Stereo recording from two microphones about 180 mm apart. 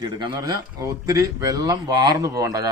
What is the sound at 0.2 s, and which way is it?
Speech, 25° right (ahead or behind).